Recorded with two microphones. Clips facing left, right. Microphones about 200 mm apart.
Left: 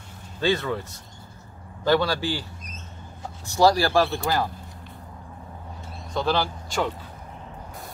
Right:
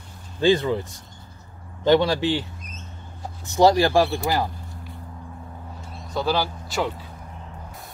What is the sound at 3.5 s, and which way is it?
Speech, 20° right (ahead or behind).